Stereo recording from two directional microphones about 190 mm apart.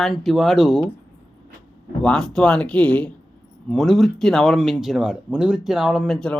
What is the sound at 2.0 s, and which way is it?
A woman's voice, 5° left (ahead or behind).